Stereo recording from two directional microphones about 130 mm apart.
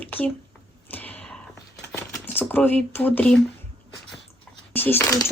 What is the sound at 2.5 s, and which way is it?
Speech, 10° left (ahead or behind).